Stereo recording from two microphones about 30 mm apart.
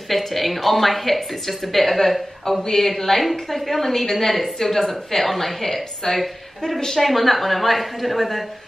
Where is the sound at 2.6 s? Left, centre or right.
Centre.